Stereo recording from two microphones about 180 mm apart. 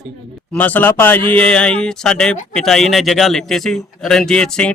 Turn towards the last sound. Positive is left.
turn(degrees=5)  # may be behind; listen again after turning